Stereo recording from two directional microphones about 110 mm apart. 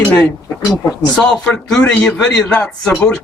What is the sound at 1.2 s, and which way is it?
Speech, 10° left (ahead or behind).